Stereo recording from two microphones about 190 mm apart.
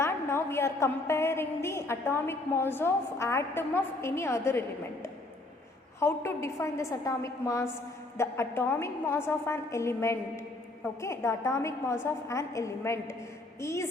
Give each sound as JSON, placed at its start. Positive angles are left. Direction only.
{"t": 0.0, "sound": "a woman's voice", "side_deg": 15}
{"t": 6.0, "sound": "a woman's voice", "side_deg": 15}